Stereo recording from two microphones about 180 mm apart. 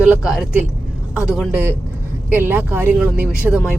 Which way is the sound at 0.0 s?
5° right (ahead or behind).